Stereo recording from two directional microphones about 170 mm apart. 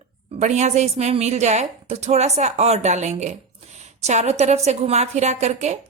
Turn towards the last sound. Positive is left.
turn(degrees=-40)  # may be behind; listen again after turning